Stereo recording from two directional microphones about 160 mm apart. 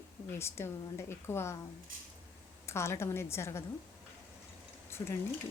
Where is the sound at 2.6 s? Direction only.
15° left (ahead or behind).